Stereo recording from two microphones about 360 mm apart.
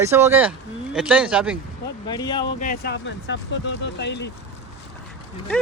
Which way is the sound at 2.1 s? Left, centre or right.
Centre.